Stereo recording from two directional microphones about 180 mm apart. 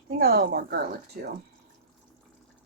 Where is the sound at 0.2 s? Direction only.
60° right (ahead or behind).